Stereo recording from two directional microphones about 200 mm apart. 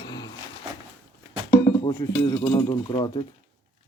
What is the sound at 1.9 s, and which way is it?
Speech, 20° left (ahead or behind).